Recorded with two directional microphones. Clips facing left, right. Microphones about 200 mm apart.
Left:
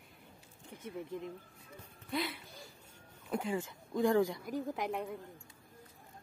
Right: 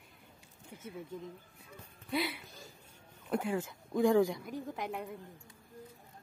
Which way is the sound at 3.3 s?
10° right (ahead or behind).